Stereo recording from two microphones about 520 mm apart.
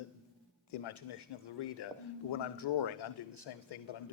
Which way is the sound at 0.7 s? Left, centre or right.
Left.